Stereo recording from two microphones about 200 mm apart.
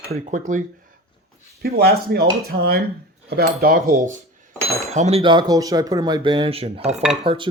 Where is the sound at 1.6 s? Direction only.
50° right (ahead or behind).